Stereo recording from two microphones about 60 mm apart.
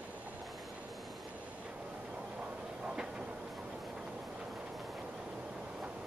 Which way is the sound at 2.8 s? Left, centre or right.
Centre.